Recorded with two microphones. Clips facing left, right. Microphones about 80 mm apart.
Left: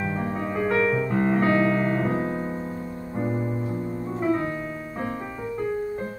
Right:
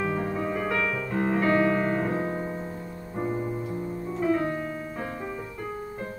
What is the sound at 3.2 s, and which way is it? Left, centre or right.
Music, left.